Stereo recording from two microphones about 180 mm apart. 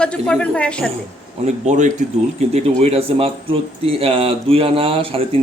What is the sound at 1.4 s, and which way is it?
Speech, 40° right (ahead or behind).